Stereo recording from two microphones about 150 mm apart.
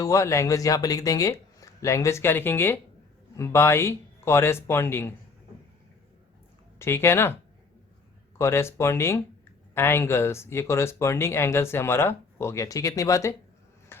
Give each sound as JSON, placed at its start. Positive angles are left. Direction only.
{"t": 0.0, "sound": "speech", "side_deg": 20}
{"t": 6.7, "sound": "speech", "side_deg": 15}
{"t": 8.4, "sound": "speech", "side_deg": 15}
{"t": 13.9, "sound": "a sound", "side_deg": 15}